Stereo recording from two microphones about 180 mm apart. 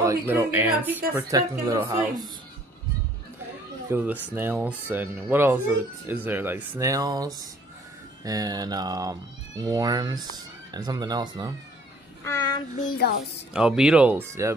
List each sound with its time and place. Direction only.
0.0 s speech: 15° right (ahead or behind)
3.9 s speech: 10° right (ahead or behind)
12.8 s a woman's voice: 55° left (ahead or behind)
13.5 s speech: 5° right (ahead or behind)